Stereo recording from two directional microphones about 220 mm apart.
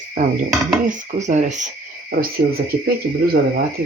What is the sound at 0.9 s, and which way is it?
Speech, 35° right (ahead or behind).